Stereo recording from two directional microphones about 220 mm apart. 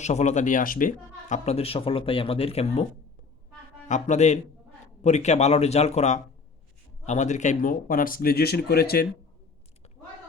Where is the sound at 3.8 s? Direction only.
35° left (ahead or behind).